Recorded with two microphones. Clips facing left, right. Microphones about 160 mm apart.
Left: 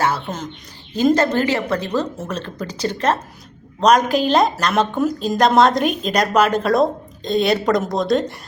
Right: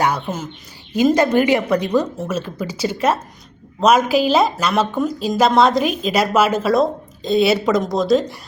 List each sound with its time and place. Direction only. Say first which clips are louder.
0.0 s a woman's voice: right 1 dB; 10° right (ahead or behind)